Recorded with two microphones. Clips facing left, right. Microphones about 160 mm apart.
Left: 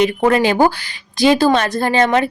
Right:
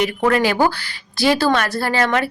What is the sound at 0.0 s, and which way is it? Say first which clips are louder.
A woman's voice: left 3 dB; 20° left (ahead or behind).